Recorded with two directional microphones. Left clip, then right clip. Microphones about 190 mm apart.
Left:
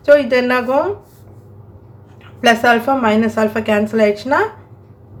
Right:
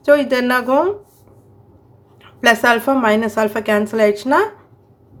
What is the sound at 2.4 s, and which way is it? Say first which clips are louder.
A woman's voice: left 1 dB; 30° right (ahead or behind).